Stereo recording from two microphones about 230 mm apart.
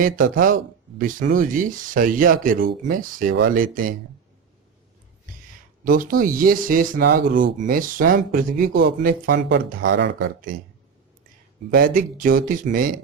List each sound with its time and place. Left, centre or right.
0.0 s speech: right
5.8 s speech: right
11.7 s speech: right